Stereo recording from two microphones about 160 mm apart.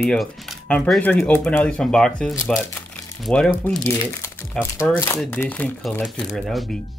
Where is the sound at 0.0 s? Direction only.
Centre (ahead or behind).